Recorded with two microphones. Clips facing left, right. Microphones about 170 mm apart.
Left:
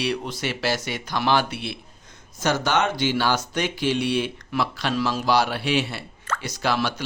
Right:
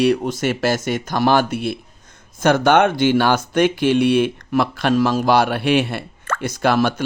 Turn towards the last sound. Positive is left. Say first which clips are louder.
# right 7 dB
turn(degrees=-50)  # may be behind; listen again after turning